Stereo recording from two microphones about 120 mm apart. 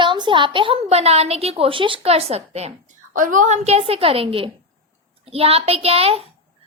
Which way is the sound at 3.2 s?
90° right.